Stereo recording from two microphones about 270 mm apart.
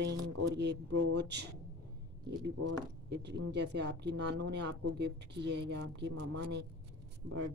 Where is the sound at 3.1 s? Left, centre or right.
Right.